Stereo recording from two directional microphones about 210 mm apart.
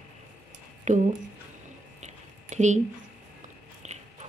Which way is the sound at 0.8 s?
35° right (ahead or behind).